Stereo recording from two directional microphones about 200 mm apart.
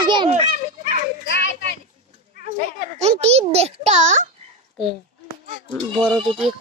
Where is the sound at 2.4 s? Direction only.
35° right (ahead or behind).